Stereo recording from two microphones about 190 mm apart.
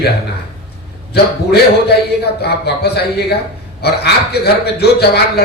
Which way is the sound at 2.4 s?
60° left (ahead or behind).